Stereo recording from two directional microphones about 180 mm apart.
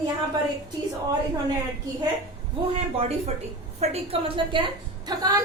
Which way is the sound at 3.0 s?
35° right (ahead or behind).